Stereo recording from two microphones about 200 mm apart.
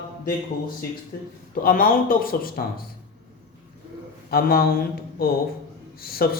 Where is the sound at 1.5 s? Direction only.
45° left (ahead or behind).